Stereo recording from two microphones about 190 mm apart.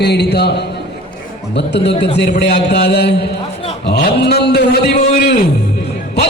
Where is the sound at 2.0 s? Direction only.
60° left (ahead or behind).